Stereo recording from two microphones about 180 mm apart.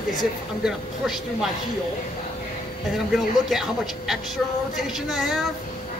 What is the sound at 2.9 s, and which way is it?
A woman's voice, centre (ahead or behind).